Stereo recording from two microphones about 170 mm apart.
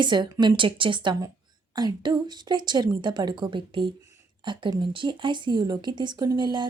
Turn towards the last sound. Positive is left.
turn(degrees=-25)  # may be behind; listen again after turning